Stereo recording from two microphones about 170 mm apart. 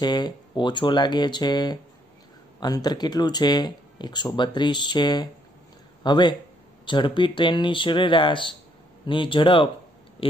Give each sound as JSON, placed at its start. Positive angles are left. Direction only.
{"t": 0.0, "sound": "speech", "side_deg": 25}